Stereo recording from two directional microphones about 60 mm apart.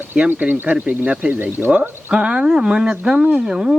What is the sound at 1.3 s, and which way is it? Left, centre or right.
Speech, right.